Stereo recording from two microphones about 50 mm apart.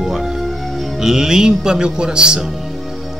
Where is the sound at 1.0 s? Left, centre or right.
Centre.